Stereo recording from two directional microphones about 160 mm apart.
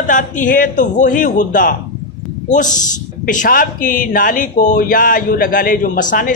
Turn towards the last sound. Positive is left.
turn(degrees=55)  # may be behind; listen again after turning